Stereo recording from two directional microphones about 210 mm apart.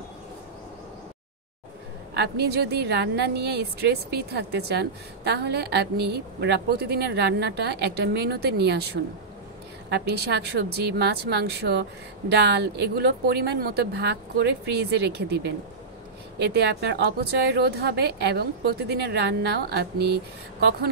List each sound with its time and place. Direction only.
2.1 s a woman's voice: 50° right (ahead or behind)